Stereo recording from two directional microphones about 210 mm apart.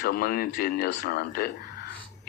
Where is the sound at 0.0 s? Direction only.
45° left (ahead or behind).